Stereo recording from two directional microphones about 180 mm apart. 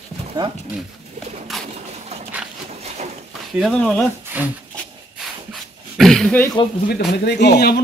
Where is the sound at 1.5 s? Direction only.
Centre (ahead or behind).